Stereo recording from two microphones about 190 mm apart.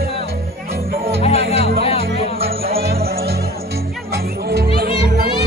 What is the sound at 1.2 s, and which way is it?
Music, 35° left (ahead or behind).